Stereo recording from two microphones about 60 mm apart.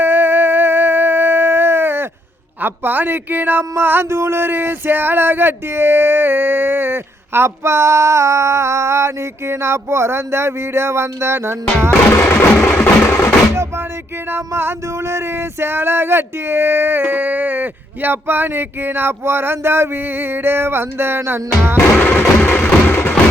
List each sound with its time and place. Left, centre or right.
0.0 s howl: right
2.6 s speech: right
12.6 s music: left
14.3 s speech: right
21.9 s music: left